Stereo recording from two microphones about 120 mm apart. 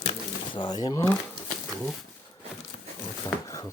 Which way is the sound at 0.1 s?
40° left (ahead or behind).